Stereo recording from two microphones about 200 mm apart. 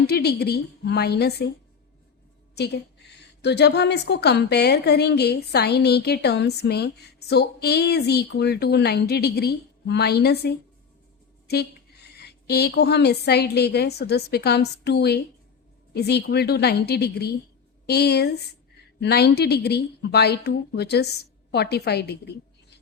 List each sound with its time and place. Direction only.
0.1 s a woman's voice: 55° left (ahead or behind)
2.6 s a woman's voice: 55° left (ahead or behind)